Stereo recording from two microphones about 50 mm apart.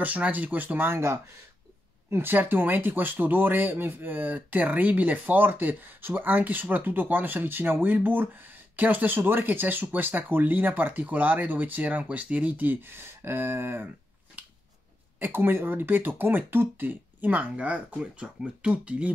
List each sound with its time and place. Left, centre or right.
0.0 s speech: right
2.3 s speech: right
15.1 s speech: right